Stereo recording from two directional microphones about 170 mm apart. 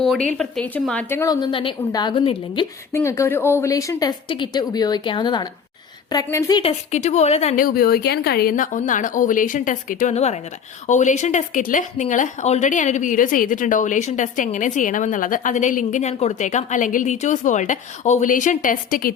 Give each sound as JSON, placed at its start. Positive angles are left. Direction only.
{"t": 0.3, "sound": "speech", "side_deg": 5}
{"t": 1.2, "sound": "a woman's voice", "side_deg": 25}
{"t": 2.9, "sound": "a woman's voice", "side_deg": 15}
{"t": 6.6, "sound": "a woman's voice", "side_deg": 40}
{"t": 7.5, "sound": "speech", "side_deg": 55}